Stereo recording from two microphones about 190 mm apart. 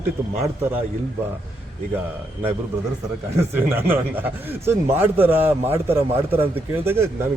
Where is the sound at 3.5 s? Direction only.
10° right (ahead or behind).